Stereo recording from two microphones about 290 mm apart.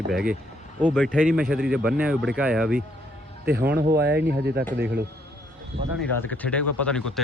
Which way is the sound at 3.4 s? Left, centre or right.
Right.